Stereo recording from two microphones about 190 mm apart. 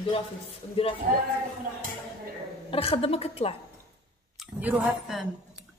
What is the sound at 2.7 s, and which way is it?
Speech, 30° left (ahead or behind).